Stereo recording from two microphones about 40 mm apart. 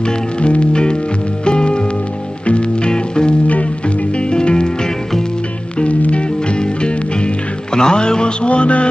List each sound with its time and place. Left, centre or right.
0.0 s music: left
3.4 s music: left
4.2 s music: left
5.8 s music: left